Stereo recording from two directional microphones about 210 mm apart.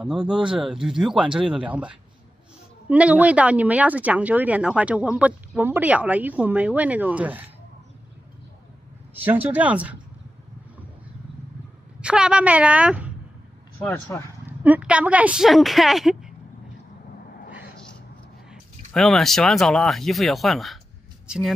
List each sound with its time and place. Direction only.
0.0 s speech: 5° right (ahead or behind)
9.1 s speech: 10° right (ahead or behind)
12.0 s speech: 5° right (ahead or behind)
13.7 s speech: 5° left (ahead or behind)
14.4 s speech: 10° right (ahead or behind)
18.5 s speech: centre (ahead or behind)